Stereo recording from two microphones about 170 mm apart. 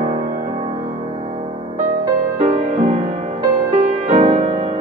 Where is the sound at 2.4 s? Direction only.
40° right (ahead or behind).